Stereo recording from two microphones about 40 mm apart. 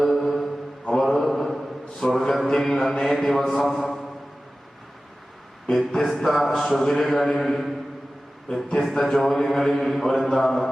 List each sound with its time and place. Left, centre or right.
0.0 s mantra: centre
2.5 s a man's voice: centre
5.9 s a man's voice: centre
8.5 s a man's voice: left
9.0 s speech: centre